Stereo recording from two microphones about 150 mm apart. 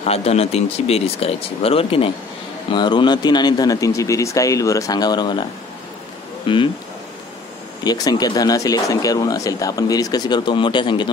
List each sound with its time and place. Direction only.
0.0 s speech: 45° left (ahead or behind); by 5.4 s 30° left (ahead or behind)
6.4 s speech: 35° left (ahead or behind)
7.8 s speech: 25° left (ahead or behind)